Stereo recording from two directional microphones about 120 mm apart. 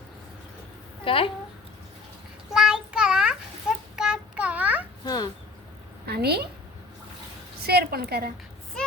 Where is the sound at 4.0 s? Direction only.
5° right (ahead or behind).